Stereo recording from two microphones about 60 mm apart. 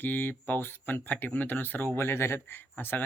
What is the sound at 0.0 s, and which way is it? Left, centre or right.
Speech, left.